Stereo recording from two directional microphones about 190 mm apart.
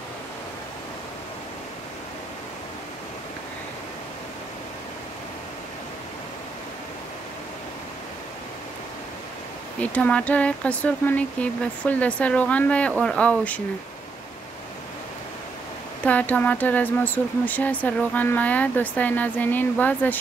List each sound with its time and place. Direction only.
9.8 s speech: 5° left (ahead or behind)
16.0 s speech: 10° left (ahead or behind)